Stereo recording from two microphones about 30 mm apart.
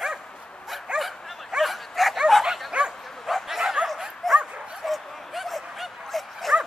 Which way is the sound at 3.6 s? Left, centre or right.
Centre.